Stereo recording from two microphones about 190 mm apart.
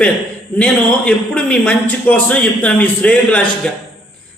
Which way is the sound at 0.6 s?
5° left (ahead or behind).